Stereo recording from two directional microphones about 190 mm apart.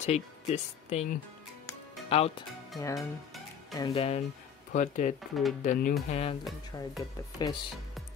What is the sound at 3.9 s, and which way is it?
Speech, 30° left (ahead or behind).